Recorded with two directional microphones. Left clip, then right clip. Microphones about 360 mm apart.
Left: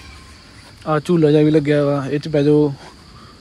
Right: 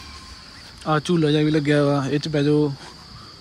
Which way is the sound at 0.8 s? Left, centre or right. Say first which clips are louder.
Left 5 dB; centre.